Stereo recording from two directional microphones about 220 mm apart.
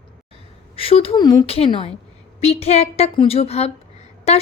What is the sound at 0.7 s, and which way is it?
A woman's voice, 25° left (ahead or behind).